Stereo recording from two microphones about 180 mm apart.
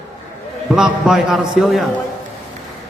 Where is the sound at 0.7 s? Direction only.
Centre (ahead or behind).